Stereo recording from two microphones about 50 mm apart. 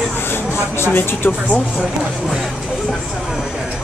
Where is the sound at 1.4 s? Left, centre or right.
Left.